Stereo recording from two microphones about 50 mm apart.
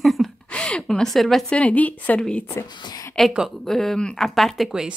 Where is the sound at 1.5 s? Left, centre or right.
Left.